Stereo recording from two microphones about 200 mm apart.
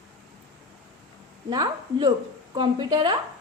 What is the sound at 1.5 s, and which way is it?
A woman's voice, 20° right (ahead or behind).